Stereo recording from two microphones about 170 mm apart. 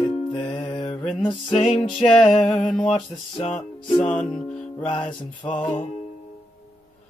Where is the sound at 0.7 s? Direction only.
30° left (ahead or behind).